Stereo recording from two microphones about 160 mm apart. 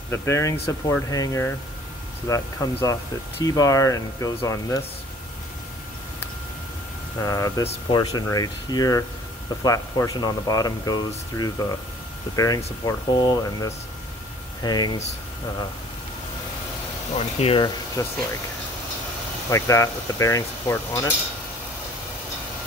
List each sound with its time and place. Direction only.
0.1 s speech: 15° left (ahead or behind)
7.2 s speech: 20° left (ahead or behind)
17.1 s speech: 40° left (ahead or behind)
18.0 s speech: 20° left (ahead or behind)
19.5 s speech: 20° left (ahead or behind)